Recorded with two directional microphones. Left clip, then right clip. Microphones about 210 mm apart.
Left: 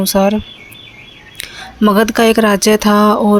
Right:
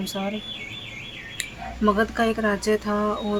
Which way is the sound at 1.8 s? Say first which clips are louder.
Left 11 dB; 45° left (ahead or behind).